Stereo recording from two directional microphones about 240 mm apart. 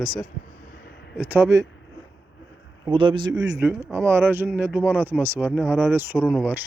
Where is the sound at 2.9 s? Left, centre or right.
Right.